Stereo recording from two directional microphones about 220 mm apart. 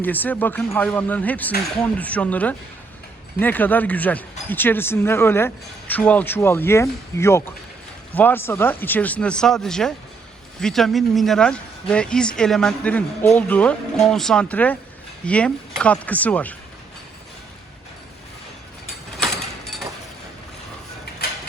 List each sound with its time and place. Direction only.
0.0 s speech: 10° left (ahead or behind)